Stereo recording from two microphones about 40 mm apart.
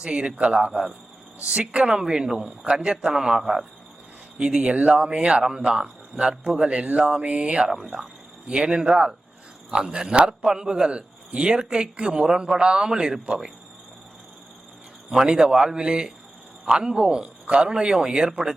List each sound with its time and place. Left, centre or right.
0.0 s a man's voice: right
0.7 s a man's voice: centre
15.3 s a man's voice: centre